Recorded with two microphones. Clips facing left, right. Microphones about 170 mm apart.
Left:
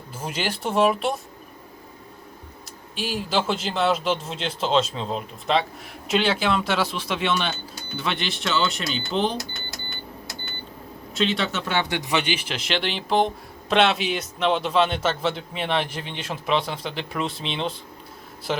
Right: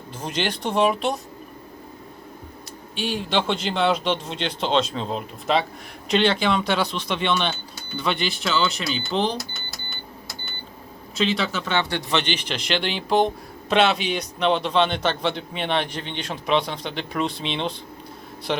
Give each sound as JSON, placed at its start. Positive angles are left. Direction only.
{"t": 0.2, "sound": "speech", "side_deg": 5}
{"t": 2.9, "sound": "speech", "side_deg": 0}
{"t": 11.1, "sound": "speech", "side_deg": 0}